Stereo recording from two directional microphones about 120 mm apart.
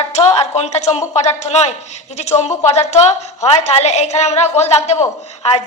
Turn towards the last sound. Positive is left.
turn(degrees=65)  # may be behind; listen again after turning